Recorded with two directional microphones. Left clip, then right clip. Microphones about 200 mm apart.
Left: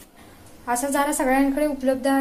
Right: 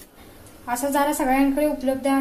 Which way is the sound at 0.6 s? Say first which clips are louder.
Right 1 dB; 30° left (ahead or behind).